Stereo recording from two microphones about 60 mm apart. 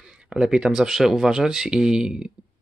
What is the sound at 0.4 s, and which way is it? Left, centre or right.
Speech, centre.